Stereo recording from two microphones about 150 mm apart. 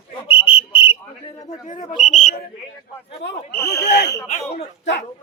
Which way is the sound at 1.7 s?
55° left (ahead or behind).